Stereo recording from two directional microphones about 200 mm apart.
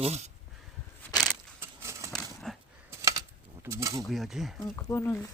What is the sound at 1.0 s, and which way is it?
Keys jangling, 10° left (ahead or behind).